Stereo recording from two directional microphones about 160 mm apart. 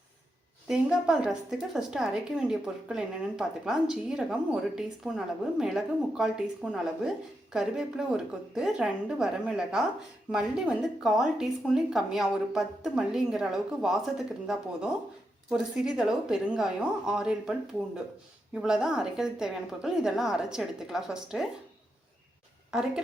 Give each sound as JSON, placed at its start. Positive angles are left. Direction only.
{"t": 0.7, "sound": "a woman's voice", "side_deg": -5}